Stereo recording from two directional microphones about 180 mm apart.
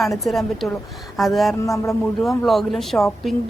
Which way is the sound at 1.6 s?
15° left (ahead or behind).